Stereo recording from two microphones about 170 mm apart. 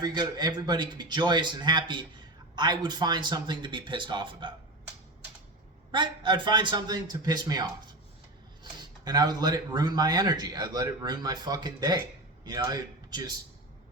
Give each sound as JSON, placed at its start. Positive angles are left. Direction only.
{"t": 0.0, "sound": "speech", "side_deg": -25}
{"t": 5.9, "sound": "speech", "side_deg": -25}
{"t": 9.0, "sound": "a man's voice", "side_deg": -25}